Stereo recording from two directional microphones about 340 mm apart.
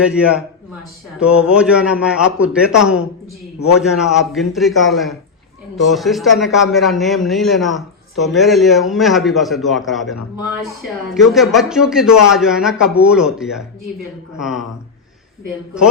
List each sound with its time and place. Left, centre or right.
0.0 s a man's voice: centre